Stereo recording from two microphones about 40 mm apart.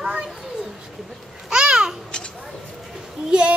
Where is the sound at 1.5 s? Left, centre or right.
Right.